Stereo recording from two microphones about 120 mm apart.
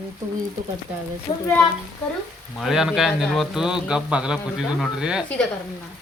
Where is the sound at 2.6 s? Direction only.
5° right (ahead or behind).